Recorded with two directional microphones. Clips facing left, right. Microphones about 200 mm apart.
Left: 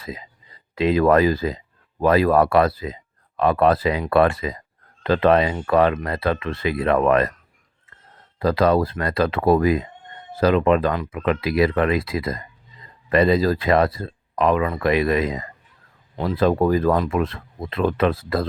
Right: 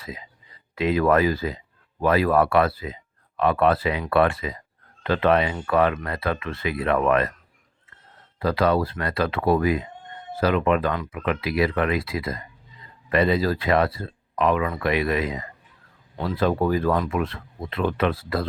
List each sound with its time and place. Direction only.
0.0 s speech: 40° left (ahead or behind)
8.4 s speech: 40° left (ahead or behind)